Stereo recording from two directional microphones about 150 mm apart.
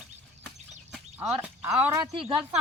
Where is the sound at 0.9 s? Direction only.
10° right (ahead or behind).